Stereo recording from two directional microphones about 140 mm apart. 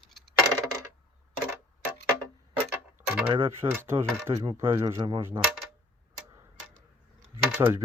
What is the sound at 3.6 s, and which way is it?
Speech, 15° right (ahead or behind).